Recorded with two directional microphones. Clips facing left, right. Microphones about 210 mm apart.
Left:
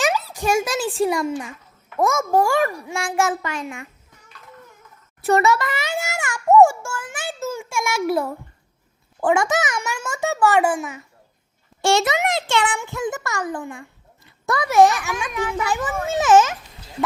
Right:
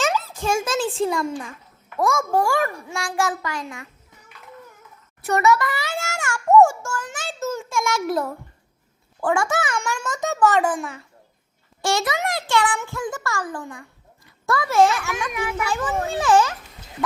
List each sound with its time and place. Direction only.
0.0 s a sound: 15° left (ahead or behind)
0.3 s a child's voice: 15° left (ahead or behind)
2.0 s a child's voice: 20° left (ahead or behind)
5.2 s a sound: 30° left (ahead or behind); by 8.3 s 10° left (ahead or behind)
9.2 s a child's voice: 20° left (ahead or behind)
9.7 s a child's voice: 10° left (ahead or behind)
11.8 s a child's voice: 25° left (ahead or behind)
15.3 s a child's voice: 15° right (ahead or behind)
15.5 s a child's voice: 15° left (ahead or behind)